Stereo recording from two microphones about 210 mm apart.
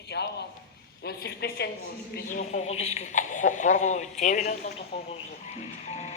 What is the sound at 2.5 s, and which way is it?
Speech, 35° left (ahead or behind).